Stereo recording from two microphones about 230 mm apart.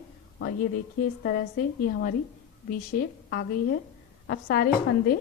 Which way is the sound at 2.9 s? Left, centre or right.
Left.